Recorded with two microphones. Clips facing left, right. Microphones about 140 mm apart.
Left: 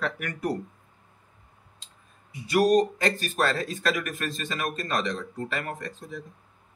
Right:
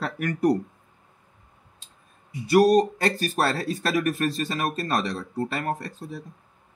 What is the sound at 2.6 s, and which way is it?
Speech, 35° right (ahead or behind).